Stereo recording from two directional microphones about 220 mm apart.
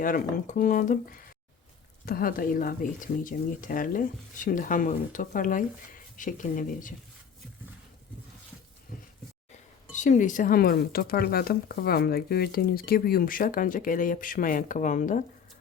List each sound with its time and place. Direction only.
0.0 s speech: 35° left (ahead or behind)
9.9 s speech: 35° left (ahead or behind)